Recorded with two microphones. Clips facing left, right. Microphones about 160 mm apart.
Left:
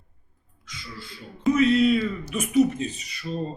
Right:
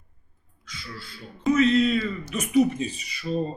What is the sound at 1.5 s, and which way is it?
Speech, 10° left (ahead or behind).